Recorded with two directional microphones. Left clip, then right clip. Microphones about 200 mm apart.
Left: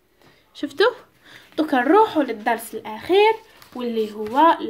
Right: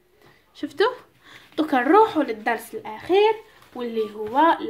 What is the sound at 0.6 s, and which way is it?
A woman's voice, 15° left (ahead or behind).